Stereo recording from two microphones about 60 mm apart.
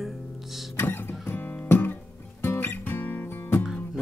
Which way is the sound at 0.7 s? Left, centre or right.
Left.